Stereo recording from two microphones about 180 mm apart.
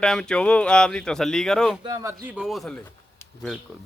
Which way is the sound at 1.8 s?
20° right (ahead or behind).